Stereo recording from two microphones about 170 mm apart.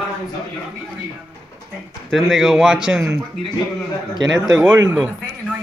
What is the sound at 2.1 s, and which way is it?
A man's voice, centre (ahead or behind).